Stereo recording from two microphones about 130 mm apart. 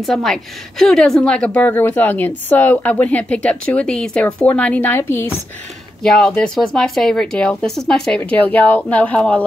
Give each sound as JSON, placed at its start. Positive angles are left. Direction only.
{"t": 0.0, "sound": "a woman's voice", "side_deg": 0}
{"t": 6.0, "sound": "speech", "side_deg": 5}
{"t": 8.2, "sound": "a woman's voice", "side_deg": 15}